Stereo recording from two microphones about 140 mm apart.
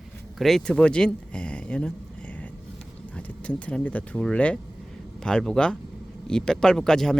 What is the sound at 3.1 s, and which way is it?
Speech, 10° left (ahead or behind).